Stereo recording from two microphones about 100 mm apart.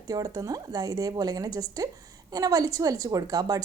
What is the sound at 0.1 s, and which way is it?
Speech, 35° right (ahead or behind).